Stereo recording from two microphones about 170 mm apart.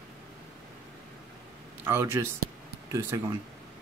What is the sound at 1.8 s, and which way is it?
Speech, 15° right (ahead or behind).